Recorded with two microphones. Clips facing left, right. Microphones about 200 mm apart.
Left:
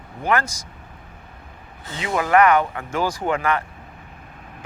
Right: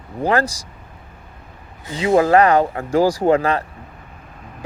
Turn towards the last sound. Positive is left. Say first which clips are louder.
# right 6 dB
turn(degrees=-35)  # may be behind; listen again after turning